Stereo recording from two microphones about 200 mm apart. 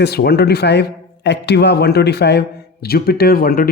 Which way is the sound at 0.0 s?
55° left (ahead or behind).